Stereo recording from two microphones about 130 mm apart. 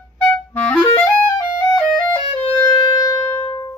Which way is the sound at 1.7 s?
Centre (ahead or behind).